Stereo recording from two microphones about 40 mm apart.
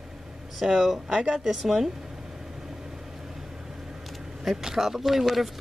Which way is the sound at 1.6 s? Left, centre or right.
Centre.